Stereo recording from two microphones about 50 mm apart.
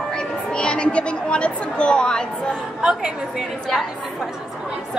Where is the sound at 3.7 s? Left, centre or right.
Centre.